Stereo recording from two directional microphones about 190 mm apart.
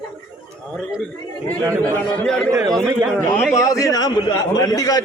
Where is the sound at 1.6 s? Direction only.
15° right (ahead or behind).